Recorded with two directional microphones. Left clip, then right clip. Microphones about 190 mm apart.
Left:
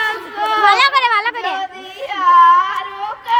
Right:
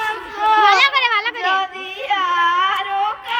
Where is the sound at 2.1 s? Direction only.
25° left (ahead or behind).